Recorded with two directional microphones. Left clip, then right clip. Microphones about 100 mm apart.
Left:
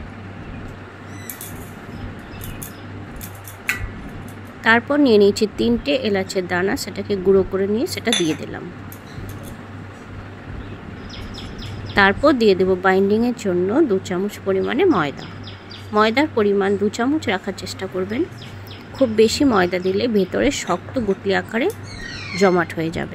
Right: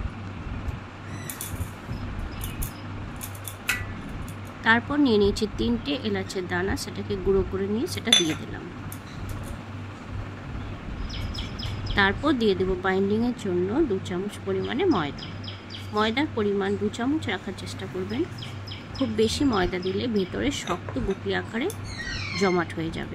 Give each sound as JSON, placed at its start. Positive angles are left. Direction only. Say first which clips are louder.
{"t": 4.6, "sound": "speech", "louder": "left 6 dB", "side_deg": 35}
{"t": 11.9, "sound": "speech", "louder": "left 8 dB", "side_deg": 50}